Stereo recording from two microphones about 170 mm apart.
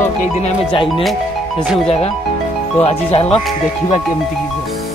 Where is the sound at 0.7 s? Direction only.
30° left (ahead or behind).